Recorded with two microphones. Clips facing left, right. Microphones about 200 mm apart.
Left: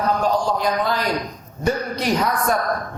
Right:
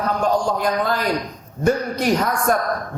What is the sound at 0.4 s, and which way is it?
A man's voice, 50° right (ahead or behind).